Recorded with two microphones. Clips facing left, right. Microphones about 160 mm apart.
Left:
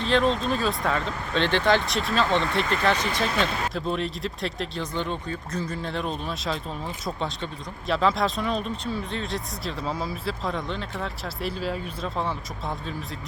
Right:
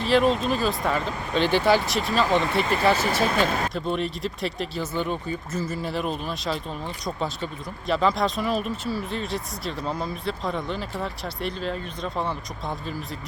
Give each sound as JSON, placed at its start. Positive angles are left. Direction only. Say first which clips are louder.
{"t": 0.0, "sound": "speech", "louder": "right 2 dB", "side_deg": -5}